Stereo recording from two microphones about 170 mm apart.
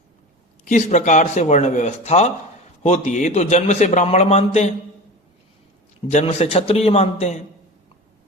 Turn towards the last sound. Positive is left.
turn(degrees=40)  # may be behind; listen again after turning